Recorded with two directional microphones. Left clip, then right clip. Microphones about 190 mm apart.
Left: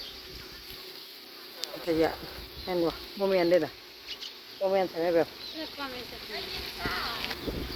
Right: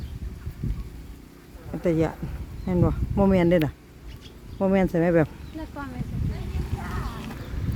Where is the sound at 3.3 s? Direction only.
35° right (ahead or behind).